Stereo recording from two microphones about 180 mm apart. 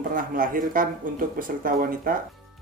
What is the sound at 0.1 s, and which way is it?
Speech, 50° right (ahead or behind).